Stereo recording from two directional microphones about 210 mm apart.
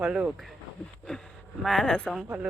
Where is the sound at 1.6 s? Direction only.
Centre (ahead or behind).